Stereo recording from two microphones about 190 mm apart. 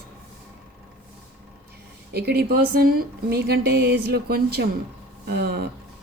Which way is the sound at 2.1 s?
55° right (ahead or behind).